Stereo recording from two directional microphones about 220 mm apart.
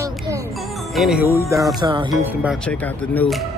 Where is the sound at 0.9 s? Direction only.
Centre (ahead or behind).